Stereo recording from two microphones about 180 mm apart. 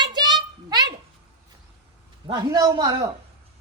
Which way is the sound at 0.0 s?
25° right (ahead or behind).